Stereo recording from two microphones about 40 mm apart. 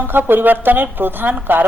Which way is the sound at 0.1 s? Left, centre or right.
Right.